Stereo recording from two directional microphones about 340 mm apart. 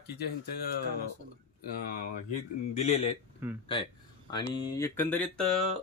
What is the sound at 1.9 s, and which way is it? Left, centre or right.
Speech, left.